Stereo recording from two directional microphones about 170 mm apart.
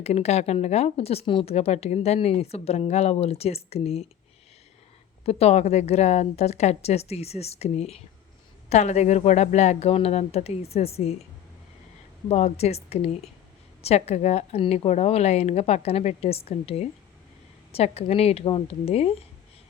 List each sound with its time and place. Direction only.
0.0 s speech: 40° left (ahead or behind)
5.2 s speech: 35° left (ahead or behind)
12.3 s speech: 40° left (ahead or behind)